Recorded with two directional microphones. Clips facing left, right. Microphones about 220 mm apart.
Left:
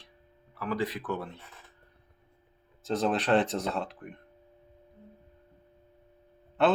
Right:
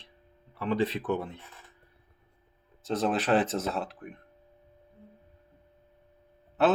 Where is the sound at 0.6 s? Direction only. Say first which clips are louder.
Right 4 dB; 25° right (ahead or behind).